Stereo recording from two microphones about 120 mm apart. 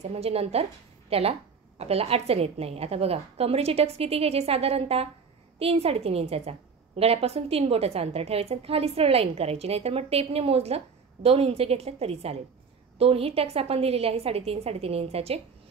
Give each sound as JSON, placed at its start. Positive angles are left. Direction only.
{"t": 0.0, "sound": "a woman's voice", "side_deg": -60}